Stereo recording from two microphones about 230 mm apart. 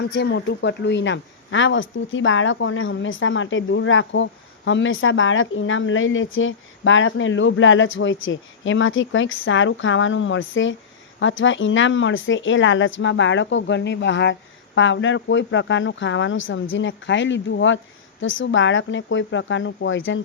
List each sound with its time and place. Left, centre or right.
0.0 s speech: left